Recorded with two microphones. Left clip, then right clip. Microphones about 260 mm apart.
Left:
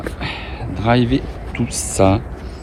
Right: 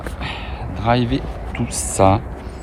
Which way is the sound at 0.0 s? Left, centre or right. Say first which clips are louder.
Left 2 dB; centre.